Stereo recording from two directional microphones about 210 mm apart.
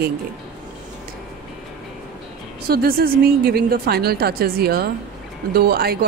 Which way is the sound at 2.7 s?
45° right (ahead or behind).